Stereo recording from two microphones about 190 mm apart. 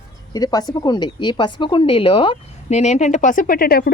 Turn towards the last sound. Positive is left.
turn(degrees=50)  # may be behind; listen again after turning